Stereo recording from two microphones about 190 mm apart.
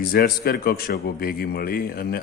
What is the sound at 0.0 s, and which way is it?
A man's voice, 55° left (ahead or behind).